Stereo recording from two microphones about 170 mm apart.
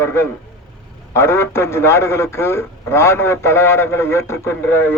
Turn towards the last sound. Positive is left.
turn(degrees=10)  # may be behind; listen again after turning